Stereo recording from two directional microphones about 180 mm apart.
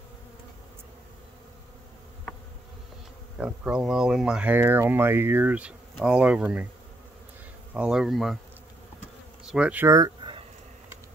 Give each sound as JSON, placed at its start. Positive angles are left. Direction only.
{"t": 3.3, "sound": "speech", "side_deg": -5}
{"t": 7.7, "sound": "speech", "side_deg": -5}
{"t": 9.5, "sound": "speech", "side_deg": -5}